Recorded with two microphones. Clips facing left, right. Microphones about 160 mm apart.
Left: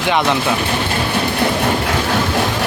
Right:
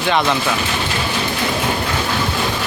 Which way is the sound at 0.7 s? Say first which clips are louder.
Left 3 dB; 55° left (ahead or behind).